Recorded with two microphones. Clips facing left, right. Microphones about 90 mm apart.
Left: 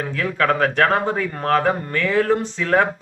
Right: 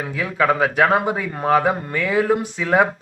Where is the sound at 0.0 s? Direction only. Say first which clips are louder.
Right 1 dB; 10° right (ahead or behind).